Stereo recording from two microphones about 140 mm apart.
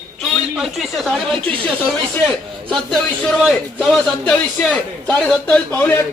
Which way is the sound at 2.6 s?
5° left (ahead or behind).